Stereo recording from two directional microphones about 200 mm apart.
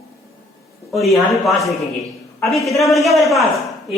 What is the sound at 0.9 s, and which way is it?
Speech, centre (ahead or behind).